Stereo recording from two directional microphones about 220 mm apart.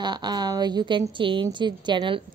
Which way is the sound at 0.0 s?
20° right (ahead or behind).